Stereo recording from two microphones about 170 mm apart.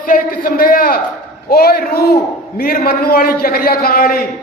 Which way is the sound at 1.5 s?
65° left (ahead or behind).